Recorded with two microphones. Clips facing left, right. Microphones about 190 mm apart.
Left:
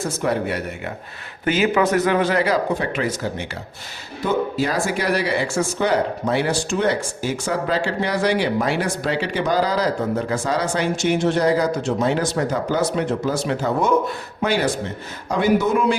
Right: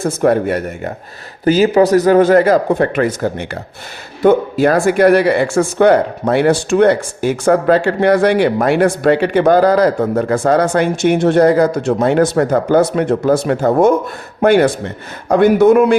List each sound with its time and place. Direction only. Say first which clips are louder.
0.0 s speech: right 9 dB; 55° right (ahead or behind)